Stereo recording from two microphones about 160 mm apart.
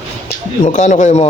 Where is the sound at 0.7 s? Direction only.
50° left (ahead or behind).